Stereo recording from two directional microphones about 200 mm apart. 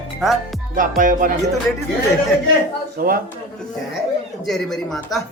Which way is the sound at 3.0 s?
45° right (ahead or behind).